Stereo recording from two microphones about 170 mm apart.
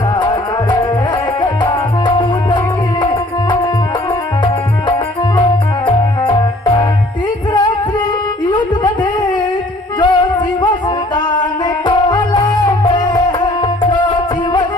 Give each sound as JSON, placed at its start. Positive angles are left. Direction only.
{"t": 0.2, "sound": "music", "side_deg": 25}
{"t": 5.4, "sound": "music", "side_deg": 25}
{"t": 8.4, "sound": "a sound", "side_deg": 25}
{"t": 10.0, "sound": "music", "side_deg": 25}